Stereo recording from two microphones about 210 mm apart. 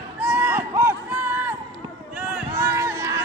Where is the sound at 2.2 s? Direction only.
10° right (ahead or behind).